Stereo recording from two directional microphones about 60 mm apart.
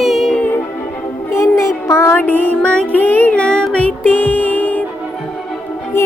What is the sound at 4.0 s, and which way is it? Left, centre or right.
Music, left.